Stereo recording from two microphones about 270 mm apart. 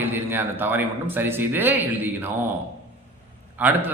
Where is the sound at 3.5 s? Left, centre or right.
Centre.